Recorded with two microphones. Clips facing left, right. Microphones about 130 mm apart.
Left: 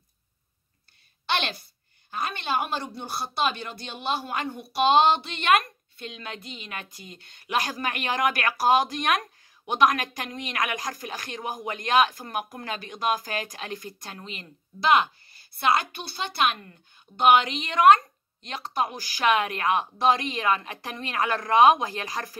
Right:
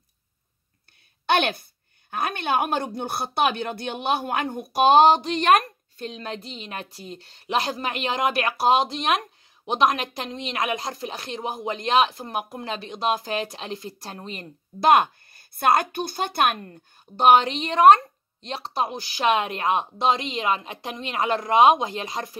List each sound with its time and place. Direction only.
1.2 s a woman's voice: 55° right (ahead or behind)
17.2 s a woman's voice: 35° right (ahead or behind)